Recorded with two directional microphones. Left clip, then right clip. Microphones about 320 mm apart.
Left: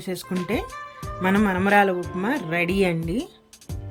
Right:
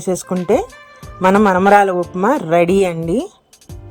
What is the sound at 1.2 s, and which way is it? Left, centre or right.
Speech, right.